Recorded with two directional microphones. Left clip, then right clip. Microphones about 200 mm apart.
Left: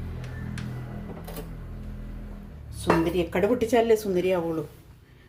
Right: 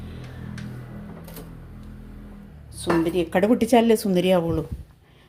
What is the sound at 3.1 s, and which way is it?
Speech, 40° right (ahead or behind).